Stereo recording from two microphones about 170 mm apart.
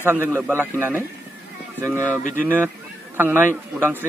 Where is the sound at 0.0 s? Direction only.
15° right (ahead or behind).